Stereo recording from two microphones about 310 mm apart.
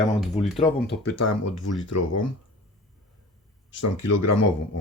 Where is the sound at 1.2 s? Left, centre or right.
Left.